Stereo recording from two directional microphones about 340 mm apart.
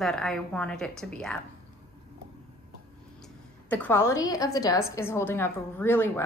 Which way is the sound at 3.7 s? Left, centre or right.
Centre.